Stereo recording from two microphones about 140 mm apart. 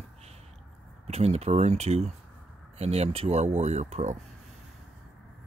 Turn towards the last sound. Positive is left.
turn(degrees=-55)  # may be behind; listen again after turning